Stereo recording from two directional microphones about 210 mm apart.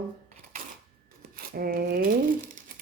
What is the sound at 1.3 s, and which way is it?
Speech, 45° right (ahead or behind).